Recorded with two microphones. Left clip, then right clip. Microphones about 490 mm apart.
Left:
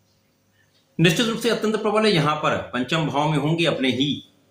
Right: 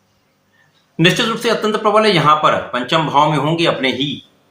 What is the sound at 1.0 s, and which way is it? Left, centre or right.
Speech, left.